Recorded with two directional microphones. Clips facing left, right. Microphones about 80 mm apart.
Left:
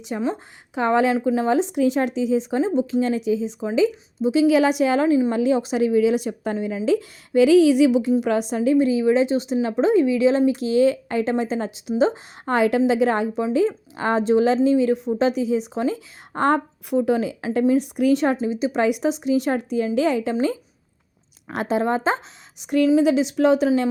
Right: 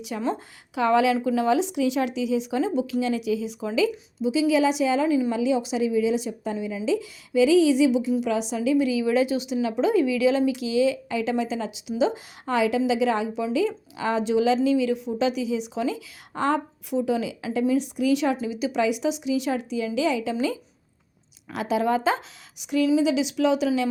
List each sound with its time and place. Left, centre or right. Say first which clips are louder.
0.1 s a woman's voice: left 3 dB; left
4.2 s a woman's voice: left 4 dB; left
5.0 s a woman's voice: left 4 dB; left
5.3 s a woman's voice: left 3 dB; left
8.2 s a woman's voice: left 4 dB; left
18.8 s a woman's voice: left 2 dB; left